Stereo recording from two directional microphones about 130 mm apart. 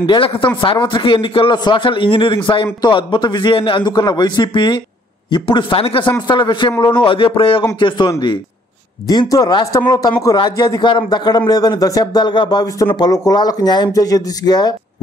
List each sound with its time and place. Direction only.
0.0 s a man's voice: 40° left (ahead or behind)
9.0 s a man's voice: 30° left (ahead or behind)